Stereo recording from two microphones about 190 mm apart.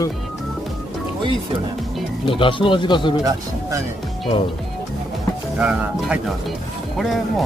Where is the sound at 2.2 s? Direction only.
25° left (ahead or behind).